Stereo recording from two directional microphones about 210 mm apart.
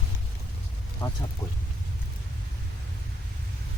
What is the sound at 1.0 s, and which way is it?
Speech, 25° left (ahead or behind).